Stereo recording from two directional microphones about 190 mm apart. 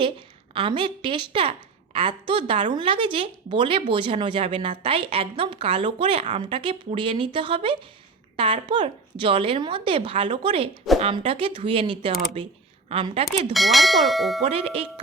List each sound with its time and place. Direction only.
0.5 s speech: 25° right (ahead or behind)
13.5 s speech: centre (ahead or behind)
14.4 s speech: 30° right (ahead or behind)